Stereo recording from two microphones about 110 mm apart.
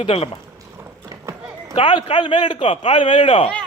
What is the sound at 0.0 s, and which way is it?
Speech, 60° left (ahead or behind).